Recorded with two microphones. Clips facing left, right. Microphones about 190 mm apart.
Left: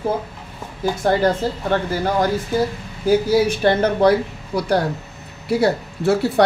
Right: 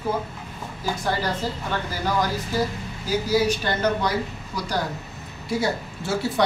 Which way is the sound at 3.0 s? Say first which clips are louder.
Left 6 dB; 55° left (ahead or behind).